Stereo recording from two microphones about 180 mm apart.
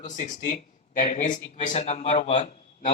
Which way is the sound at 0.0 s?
45° left (ahead or behind).